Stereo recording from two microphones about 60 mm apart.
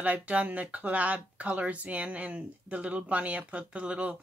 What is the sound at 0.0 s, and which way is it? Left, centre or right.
Speech, right.